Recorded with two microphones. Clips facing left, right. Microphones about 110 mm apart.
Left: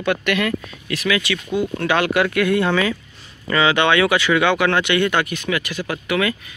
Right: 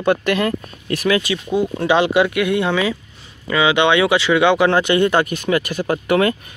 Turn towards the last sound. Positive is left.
turn(degrees=-40)  # may be behind; listen again after turning